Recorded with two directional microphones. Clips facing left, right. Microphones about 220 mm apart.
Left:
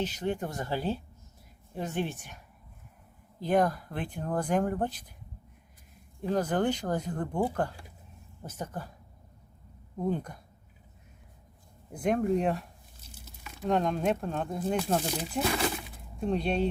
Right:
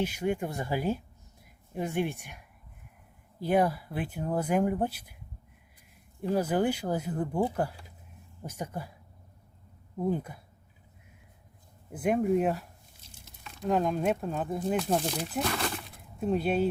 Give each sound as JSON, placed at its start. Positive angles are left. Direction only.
{"t": 0.0, "sound": "speech", "side_deg": -10}
{"t": 3.4, "sound": "speech", "side_deg": -10}
{"t": 6.2, "sound": "speech", "side_deg": -10}
{"t": 10.0, "sound": "speech", "side_deg": -5}
{"t": 11.9, "sound": "speech", "side_deg": -5}